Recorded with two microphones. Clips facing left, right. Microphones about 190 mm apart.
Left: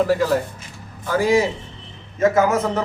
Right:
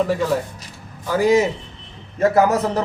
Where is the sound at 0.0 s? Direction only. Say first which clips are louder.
Left 1 dB; centre (ahead or behind).